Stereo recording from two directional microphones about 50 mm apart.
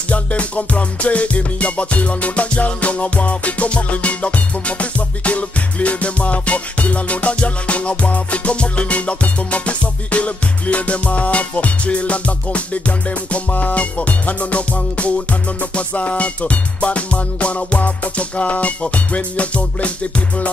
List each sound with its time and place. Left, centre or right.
0.1 s music: left